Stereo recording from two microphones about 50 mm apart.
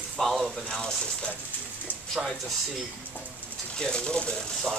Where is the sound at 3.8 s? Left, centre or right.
Centre.